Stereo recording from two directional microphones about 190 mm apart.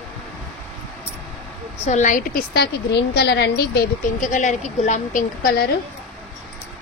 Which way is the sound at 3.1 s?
60° left (ahead or behind).